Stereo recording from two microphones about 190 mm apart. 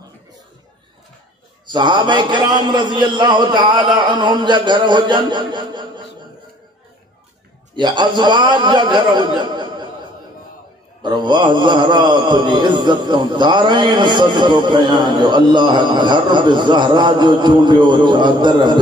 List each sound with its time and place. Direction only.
1.7 s mantra: 25° right (ahead or behind)
7.7 s mantra: 25° right (ahead or behind)
11.0 s mantra: 25° right (ahead or behind)